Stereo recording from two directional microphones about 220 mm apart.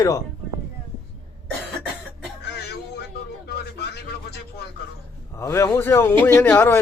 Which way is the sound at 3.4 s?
45° left (ahead or behind).